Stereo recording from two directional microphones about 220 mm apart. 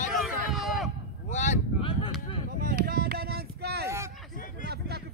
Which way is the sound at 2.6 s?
40° right (ahead or behind).